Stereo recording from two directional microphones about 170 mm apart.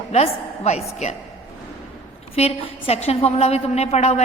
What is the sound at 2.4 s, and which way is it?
A woman's voice, 35° left (ahead or behind).